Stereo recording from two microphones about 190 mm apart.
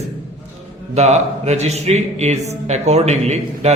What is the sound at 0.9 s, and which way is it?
A man's voice, 35° right (ahead or behind).